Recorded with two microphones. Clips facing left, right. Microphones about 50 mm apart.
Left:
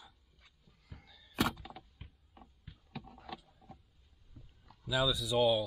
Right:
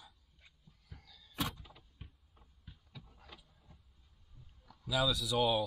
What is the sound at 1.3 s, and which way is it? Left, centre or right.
Power windows, left.